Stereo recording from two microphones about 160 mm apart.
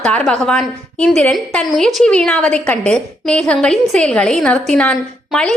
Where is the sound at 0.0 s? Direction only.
5° left (ahead or behind).